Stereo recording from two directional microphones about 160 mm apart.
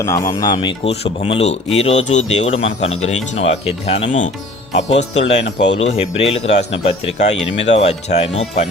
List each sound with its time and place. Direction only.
0.0 s a man's voice: 20° left (ahead or behind); by 8.6 s 45° left (ahead or behind)